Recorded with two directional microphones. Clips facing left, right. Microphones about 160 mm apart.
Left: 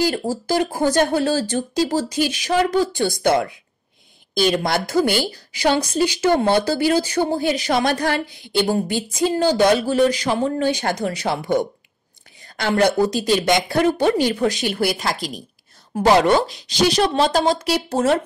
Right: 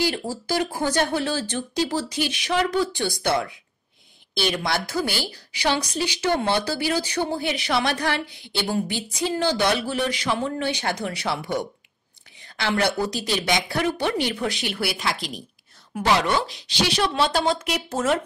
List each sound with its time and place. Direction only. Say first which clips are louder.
0.0 s a woman's voice: left 5 dB; 45° left (ahead or behind)